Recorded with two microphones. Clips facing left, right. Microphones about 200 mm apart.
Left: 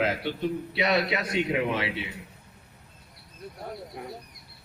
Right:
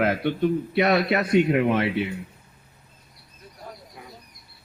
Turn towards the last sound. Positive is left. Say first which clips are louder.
# left 6 dB
turn(degrees=60)  # may be behind; listen again after turning